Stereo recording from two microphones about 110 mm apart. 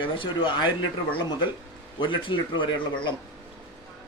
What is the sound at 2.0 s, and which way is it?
Speech, 45° left (ahead or behind).